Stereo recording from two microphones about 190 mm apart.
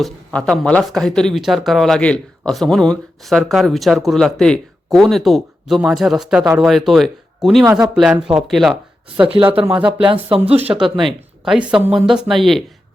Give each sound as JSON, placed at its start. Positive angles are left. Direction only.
{"t": 0.0, "sound": "speech", "side_deg": 0}
{"t": 7.6, "sound": "speech", "side_deg": -20}
{"t": 7.9, "sound": "speech", "side_deg": -5}
{"t": 9.4, "sound": "speech", "side_deg": -30}
{"t": 10.9, "sound": "speech", "side_deg": 0}